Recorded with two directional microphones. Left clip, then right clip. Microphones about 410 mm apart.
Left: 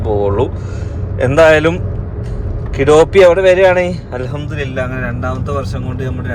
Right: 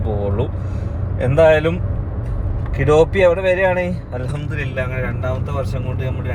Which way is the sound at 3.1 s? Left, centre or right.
Left.